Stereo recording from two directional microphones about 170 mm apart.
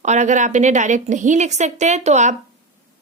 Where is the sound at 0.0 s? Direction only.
45° right (ahead or behind).